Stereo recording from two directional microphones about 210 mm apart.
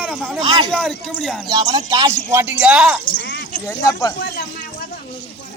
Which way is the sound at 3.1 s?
50° left (ahead or behind).